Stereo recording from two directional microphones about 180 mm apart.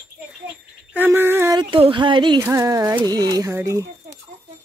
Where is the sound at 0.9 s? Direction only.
10° right (ahead or behind).